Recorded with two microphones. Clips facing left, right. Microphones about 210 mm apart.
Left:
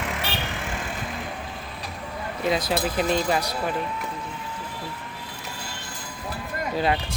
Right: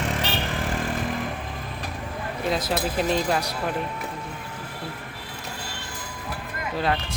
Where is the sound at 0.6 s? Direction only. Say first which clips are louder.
Right 5 dB; 40° right (ahead or behind).